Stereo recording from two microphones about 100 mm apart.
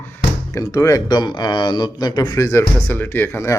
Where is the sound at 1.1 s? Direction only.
45° left (ahead or behind).